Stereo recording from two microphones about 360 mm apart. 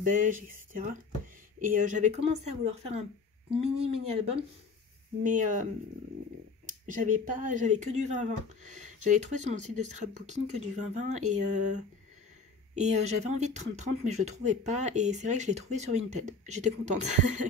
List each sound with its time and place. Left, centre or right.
0.0 s speech: right